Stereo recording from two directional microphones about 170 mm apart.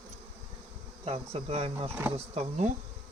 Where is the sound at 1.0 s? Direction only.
35° right (ahead or behind).